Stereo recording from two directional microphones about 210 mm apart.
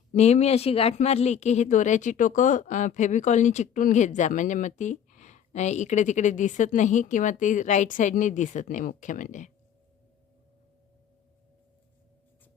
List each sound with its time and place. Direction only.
0.1 s speech: 30° left (ahead or behind)